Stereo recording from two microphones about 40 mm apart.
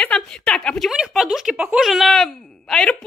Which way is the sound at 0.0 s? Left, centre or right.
Left.